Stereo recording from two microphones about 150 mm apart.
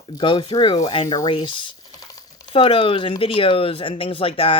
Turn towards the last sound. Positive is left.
turn(degrees=40)  # may be behind; listen again after turning